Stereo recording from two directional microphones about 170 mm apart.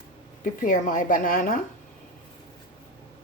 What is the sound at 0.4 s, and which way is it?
A woman's voice, 50° left (ahead or behind).